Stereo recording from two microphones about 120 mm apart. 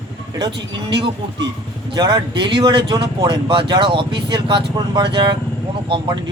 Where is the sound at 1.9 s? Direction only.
40° right (ahead or behind).